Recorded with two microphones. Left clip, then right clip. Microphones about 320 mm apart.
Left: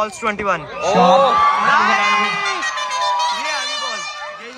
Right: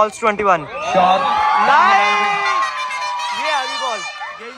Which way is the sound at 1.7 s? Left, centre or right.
Centre.